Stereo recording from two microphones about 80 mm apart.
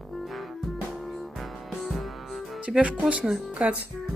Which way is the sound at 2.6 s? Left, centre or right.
Centre.